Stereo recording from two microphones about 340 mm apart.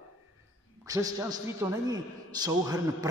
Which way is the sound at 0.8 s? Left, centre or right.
Centre.